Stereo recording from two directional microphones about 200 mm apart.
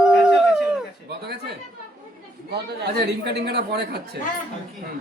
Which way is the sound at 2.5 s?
55° right (ahead or behind).